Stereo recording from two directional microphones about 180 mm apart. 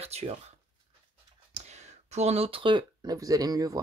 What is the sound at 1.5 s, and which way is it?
Speech, 40° right (ahead or behind).